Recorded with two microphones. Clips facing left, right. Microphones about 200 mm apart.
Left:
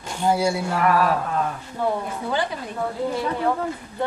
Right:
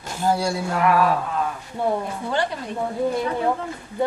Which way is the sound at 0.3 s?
5° left (ahead or behind).